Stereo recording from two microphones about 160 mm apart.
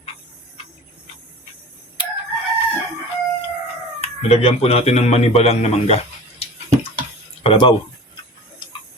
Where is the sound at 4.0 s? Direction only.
40° left (ahead or behind).